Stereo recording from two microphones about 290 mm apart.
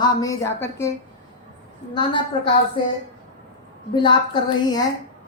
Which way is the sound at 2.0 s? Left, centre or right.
Centre.